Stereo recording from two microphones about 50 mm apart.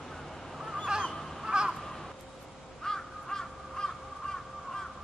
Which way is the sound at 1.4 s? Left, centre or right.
Centre.